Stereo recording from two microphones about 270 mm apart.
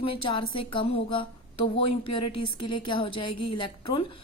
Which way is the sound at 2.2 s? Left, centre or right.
Left.